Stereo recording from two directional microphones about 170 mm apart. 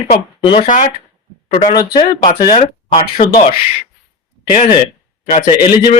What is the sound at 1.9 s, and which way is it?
Speech, 25° left (ahead or behind).